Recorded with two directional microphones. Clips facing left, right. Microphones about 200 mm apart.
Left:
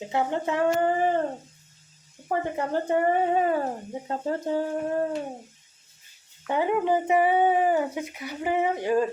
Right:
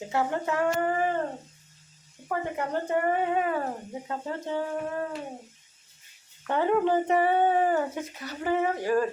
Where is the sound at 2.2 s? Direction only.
30° left (ahead or behind).